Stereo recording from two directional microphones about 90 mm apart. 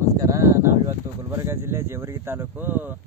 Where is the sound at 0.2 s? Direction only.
35° right (ahead or behind).